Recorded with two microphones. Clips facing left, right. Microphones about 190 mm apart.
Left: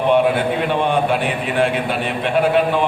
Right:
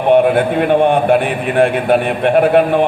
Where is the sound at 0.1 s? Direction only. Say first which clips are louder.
Right 6 dB; 55° right (ahead or behind).